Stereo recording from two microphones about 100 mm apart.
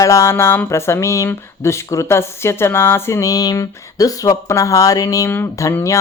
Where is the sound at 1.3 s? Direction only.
30° left (ahead or behind).